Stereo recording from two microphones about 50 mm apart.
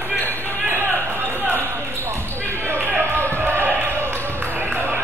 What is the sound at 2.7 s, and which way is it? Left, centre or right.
Basketball bounce, right.